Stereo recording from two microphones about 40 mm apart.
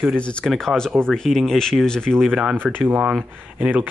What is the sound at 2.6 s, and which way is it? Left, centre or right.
Speech, centre.